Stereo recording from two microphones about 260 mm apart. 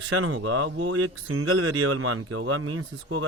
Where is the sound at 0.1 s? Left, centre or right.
Right.